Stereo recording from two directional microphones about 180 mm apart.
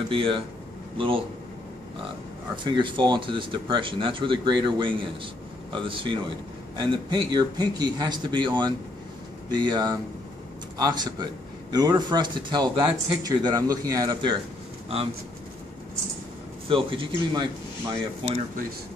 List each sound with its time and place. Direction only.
0.1 s speech: 30° right (ahead or behind)
2.5 s speech: 25° right (ahead or behind)
16.6 s speech: 30° right (ahead or behind)